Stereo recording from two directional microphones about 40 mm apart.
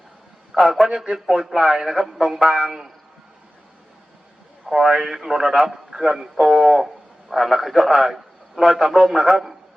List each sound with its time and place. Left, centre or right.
0.5 s a man's voice: centre
4.8 s a man's voice: centre